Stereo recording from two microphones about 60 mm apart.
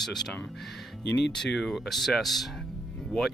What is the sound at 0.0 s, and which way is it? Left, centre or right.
Speech, centre.